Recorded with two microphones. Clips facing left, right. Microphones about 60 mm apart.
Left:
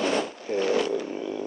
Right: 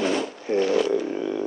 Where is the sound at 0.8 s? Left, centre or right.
Centre.